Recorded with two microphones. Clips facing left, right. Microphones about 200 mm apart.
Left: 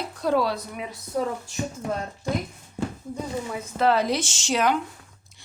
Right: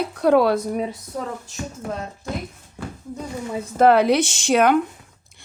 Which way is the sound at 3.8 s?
60° right (ahead or behind).